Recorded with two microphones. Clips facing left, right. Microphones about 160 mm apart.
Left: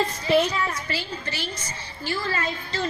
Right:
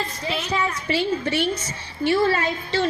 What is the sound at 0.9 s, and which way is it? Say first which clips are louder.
A woman's voice: right 9 dB; 70° right (ahead or behind).